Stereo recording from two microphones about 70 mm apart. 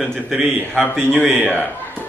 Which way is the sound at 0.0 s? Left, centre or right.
Centre.